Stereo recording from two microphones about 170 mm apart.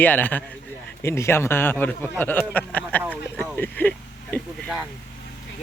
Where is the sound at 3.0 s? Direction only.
10° right (ahead or behind).